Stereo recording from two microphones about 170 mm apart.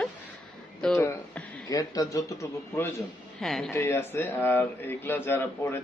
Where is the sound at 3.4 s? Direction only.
Centre (ahead or behind).